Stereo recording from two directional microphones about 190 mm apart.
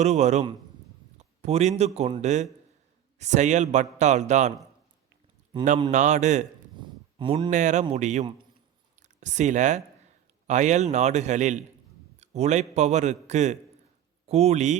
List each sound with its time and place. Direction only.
0.0 s a man's voice: 35° right (ahead or behind)
5.9 s a man's voice: 40° right (ahead or behind)
6.7 s a man's voice: 25° right (ahead or behind)